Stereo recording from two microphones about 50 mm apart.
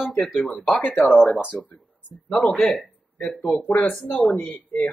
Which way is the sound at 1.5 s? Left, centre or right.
Left.